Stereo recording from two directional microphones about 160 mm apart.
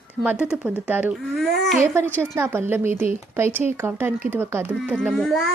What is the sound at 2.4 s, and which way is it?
Speech, 15° right (ahead or behind).